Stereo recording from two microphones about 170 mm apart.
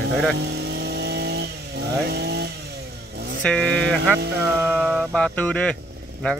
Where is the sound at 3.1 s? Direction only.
70° right (ahead or behind).